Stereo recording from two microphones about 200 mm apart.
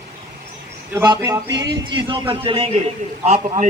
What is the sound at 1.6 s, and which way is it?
Speech, 60° right (ahead or behind).